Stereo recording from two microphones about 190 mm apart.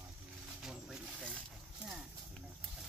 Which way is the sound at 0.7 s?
Centre (ahead or behind).